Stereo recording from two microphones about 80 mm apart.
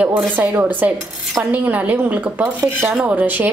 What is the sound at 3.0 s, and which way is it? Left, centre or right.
Speech, centre.